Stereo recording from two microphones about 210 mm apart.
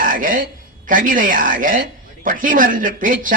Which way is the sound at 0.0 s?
40° right (ahead or behind).